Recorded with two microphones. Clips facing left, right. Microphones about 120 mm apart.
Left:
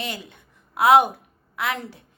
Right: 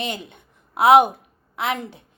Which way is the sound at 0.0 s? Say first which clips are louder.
Right 3 dB; 20° right (ahead or behind).